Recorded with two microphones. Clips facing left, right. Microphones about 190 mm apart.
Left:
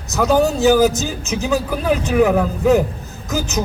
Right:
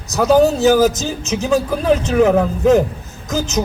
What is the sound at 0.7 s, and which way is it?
Speech, 20° left (ahead or behind).